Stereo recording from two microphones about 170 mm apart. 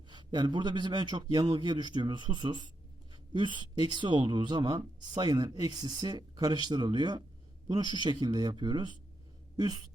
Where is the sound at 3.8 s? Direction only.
30° right (ahead or behind).